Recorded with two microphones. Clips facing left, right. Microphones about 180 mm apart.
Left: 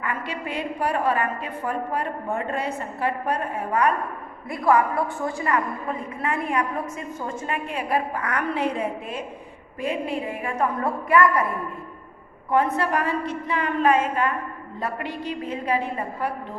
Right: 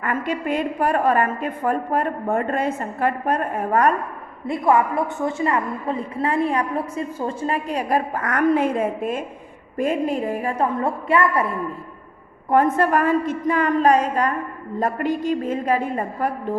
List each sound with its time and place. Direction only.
0.0 s a woman's voice: 50° right (ahead or behind)
4.4 s a woman's voice: 25° right (ahead or behind)
10.8 s a woman's voice: 25° right (ahead or behind)
12.5 s a woman's voice: 45° right (ahead or behind)